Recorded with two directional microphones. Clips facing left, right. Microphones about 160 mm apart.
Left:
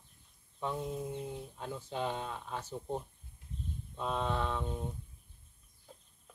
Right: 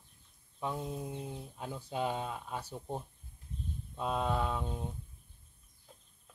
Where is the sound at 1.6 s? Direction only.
10° right (ahead or behind).